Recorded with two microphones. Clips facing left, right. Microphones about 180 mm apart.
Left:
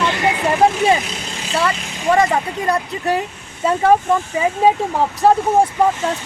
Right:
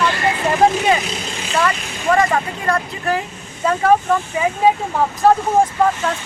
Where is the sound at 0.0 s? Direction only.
20° left (ahead or behind).